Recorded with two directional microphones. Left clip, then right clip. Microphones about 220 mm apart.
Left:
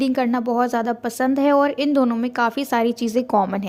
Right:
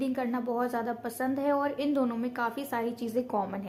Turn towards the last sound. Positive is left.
turn(degrees=40)  # may be behind; listen again after turning